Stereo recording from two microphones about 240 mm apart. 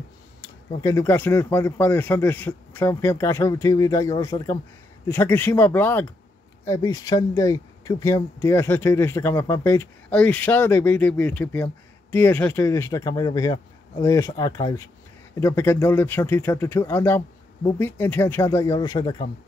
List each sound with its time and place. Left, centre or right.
0.4 s speech: centre